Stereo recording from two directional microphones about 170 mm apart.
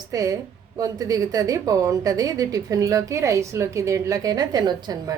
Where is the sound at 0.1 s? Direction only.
20° right (ahead or behind).